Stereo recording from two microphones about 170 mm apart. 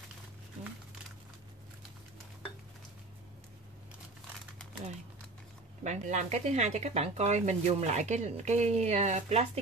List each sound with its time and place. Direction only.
5.9 s speech: 45° right (ahead or behind)